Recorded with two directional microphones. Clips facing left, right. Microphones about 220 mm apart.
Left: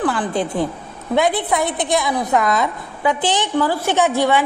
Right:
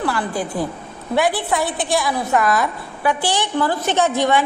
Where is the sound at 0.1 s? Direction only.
20° left (ahead or behind).